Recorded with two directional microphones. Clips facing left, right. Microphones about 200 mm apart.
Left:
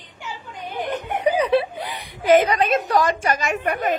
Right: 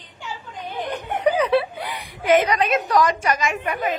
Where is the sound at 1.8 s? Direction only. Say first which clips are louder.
Left 1 dB; 35° left (ahead or behind).